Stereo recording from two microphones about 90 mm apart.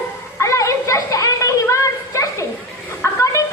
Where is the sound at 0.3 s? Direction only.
35° left (ahead or behind).